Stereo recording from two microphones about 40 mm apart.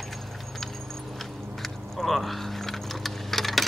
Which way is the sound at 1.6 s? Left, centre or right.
Centre.